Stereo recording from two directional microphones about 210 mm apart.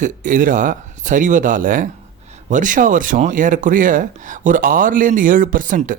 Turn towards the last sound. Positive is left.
turn(degrees=-40)  # may be behind; listen again after turning